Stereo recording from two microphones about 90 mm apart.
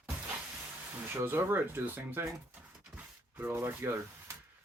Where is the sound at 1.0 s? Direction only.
25° right (ahead or behind).